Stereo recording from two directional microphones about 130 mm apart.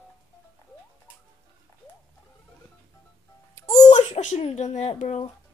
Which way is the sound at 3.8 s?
60° left (ahead or behind).